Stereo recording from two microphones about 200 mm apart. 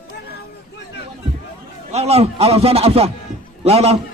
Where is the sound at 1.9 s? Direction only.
30° right (ahead or behind).